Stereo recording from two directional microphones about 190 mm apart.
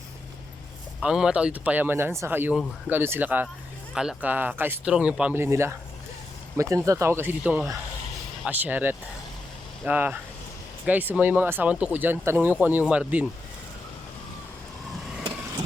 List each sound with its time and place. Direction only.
1.0 s speech: 5° right (ahead or behind)